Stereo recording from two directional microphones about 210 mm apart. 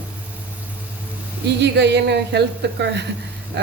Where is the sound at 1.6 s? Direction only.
55° right (ahead or behind).